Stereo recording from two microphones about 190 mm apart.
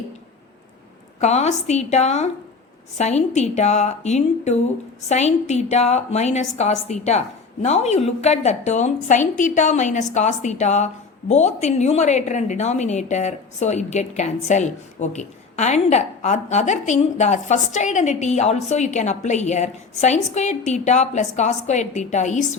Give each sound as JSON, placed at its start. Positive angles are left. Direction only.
{"t": 1.2, "sound": "a woman's voice", "side_deg": 35}